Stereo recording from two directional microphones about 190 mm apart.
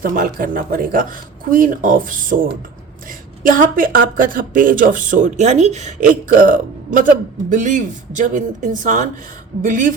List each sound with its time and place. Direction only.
0.0 s speech: 45° right (ahead or behind)